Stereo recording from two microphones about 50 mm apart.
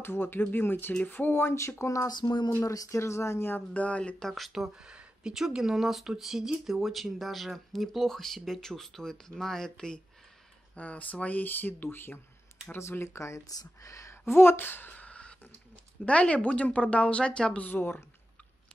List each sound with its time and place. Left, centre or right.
0.0 s speech: left
1.8 s speech: left
3.5 s speech: left
4.2 s speech: centre
4.5 s speech: centre
10.8 s speech: left
13.0 s speech: left
13.8 s speech: left
14.2 s a woman's voice: left; by 17.6 s centre
17.6 s speech: left